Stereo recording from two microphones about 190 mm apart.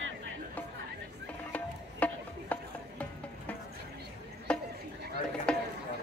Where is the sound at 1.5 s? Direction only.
10° left (ahead or behind).